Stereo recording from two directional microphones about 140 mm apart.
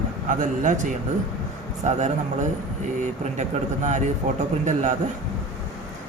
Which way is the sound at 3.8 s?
60° right (ahead or behind).